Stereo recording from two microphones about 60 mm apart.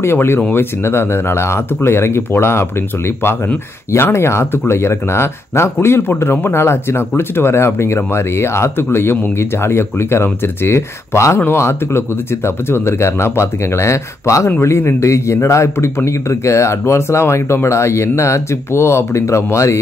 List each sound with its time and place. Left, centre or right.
0.0 s speech: left
3.9 s speech: left